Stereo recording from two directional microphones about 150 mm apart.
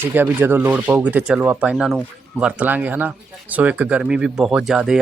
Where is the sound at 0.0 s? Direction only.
15° right (ahead or behind).